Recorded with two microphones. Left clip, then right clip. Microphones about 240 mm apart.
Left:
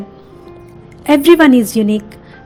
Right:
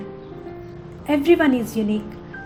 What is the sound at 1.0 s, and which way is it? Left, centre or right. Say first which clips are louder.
Speech: left 9 dB; left.